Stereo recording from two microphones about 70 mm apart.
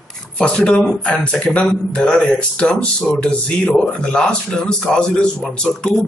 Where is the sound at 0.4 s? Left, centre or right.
Centre.